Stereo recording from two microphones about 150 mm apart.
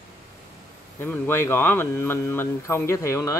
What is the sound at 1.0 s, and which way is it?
Speech, 15° left (ahead or behind).